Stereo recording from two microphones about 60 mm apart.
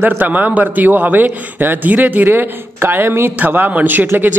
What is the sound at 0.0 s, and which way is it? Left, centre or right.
A man's voice, right.